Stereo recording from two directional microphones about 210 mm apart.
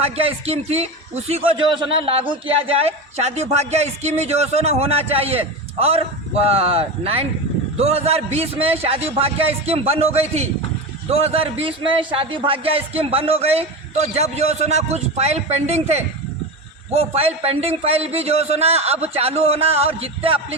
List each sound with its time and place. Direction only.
0.0 s speech: 25° right (ahead or behind)